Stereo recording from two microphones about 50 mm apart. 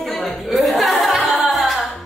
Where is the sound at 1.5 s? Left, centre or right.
Centre.